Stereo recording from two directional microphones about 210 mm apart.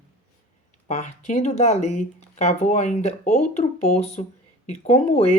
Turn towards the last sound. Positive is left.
turn(degrees=30)  # may be behind; listen again after turning